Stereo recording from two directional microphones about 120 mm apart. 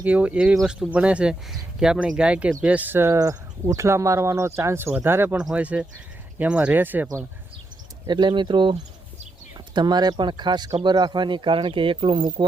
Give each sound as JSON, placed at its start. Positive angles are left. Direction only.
{"t": 0.0, "sound": "speech", "side_deg": -10}
{"t": 8.0, "sound": "speech", "side_deg": -40}
{"t": 9.7, "sound": "speech", "side_deg": -35}